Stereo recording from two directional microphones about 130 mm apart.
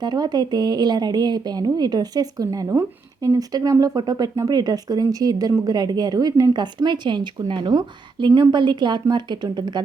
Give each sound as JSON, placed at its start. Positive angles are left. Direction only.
{"t": 0.0, "sound": "speech", "side_deg": -30}